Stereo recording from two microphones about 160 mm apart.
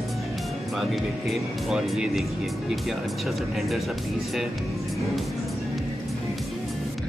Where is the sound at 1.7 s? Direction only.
5° right (ahead or behind).